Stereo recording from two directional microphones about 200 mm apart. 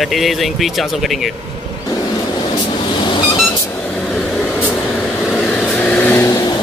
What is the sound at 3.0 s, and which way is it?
Vehicle, 25° left (ahead or behind).